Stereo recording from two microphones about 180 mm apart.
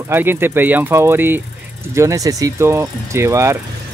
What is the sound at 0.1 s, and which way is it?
Speech, 15° right (ahead or behind).